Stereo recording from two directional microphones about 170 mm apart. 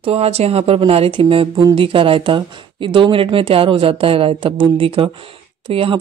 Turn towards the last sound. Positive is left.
turn(degrees=-30)  # may be behind; listen again after turning